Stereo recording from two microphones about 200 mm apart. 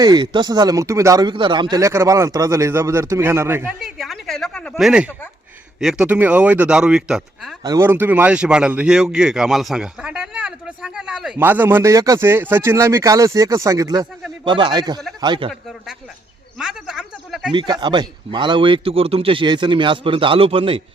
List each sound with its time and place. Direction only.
0.0 s speech: 20° right (ahead or behind)
3.8 s a sound: centre (ahead or behind)
5.8 s speech: 5° right (ahead or behind)
7.6 s speech: 15° right (ahead or behind)
16.6 s a sound: 5° right (ahead or behind)
17.5 s speech: 25° right (ahead or behind)